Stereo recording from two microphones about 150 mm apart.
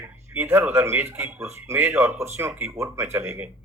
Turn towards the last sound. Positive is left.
turn(degrees=-15)  # may be behind; listen again after turning